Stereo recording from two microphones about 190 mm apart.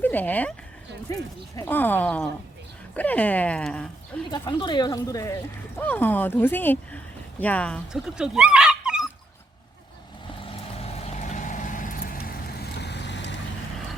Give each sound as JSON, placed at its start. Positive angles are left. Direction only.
{"t": 0.0, "sound": "speech", "side_deg": 10}
{"t": 1.5, "sound": "speech", "side_deg": 10}
{"t": 4.3, "sound": "speech", "side_deg": 25}
{"t": 10.4, "sound": "vehicle", "side_deg": 30}